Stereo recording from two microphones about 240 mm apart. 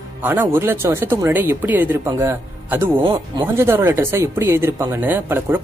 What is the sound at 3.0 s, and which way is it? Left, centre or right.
Speech, right.